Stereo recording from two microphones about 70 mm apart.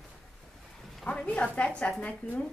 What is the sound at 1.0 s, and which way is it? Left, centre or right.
A woman's voice, centre.